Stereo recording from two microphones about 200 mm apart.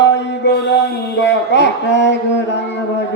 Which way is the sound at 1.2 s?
60° left (ahead or behind).